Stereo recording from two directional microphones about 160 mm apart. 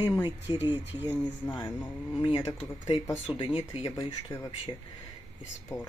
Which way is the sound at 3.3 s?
35° left (ahead or behind).